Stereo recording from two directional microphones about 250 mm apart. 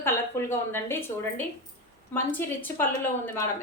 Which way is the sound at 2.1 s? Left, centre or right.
Centre.